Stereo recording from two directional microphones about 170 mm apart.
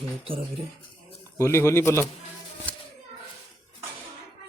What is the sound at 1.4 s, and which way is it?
Speech, 15° left (ahead or behind).